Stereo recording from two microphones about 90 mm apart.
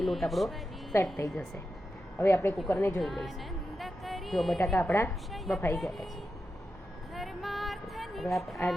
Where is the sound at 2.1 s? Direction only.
30° left (ahead or behind).